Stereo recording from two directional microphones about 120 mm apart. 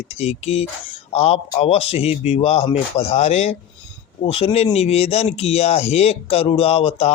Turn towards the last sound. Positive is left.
turn(degrees=55)  # may be behind; listen again after turning